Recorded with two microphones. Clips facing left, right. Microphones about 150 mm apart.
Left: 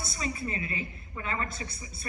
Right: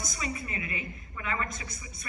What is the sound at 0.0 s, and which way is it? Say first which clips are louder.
A woman's voice: left 2 dB; 30° left (ahead or behind).